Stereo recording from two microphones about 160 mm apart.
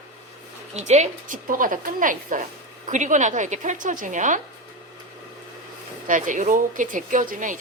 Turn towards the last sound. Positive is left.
turn(degrees=-55)  # may be behind; listen again after turning